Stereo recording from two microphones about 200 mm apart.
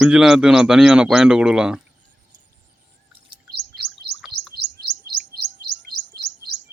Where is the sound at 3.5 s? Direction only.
55° right (ahead or behind).